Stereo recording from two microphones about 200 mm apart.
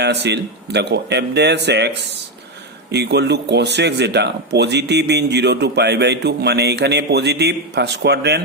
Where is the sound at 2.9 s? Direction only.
55° right (ahead or behind).